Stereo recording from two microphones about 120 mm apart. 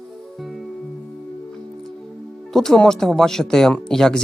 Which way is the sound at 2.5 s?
5° left (ahead or behind).